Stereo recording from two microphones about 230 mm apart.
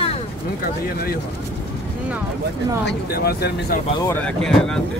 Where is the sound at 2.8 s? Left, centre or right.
Left.